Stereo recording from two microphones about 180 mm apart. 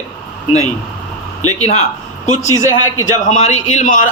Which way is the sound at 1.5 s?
35° left (ahead or behind).